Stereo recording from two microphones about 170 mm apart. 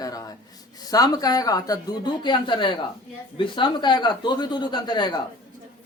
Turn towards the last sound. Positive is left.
turn(degrees=25)  # may be behind; listen again after turning